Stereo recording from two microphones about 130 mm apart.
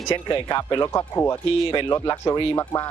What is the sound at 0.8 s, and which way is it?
Speech, 20° left (ahead or behind).